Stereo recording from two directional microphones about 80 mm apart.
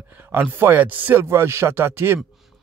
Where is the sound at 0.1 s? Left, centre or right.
Right.